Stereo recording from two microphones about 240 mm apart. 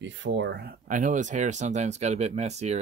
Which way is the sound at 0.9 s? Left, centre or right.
Right.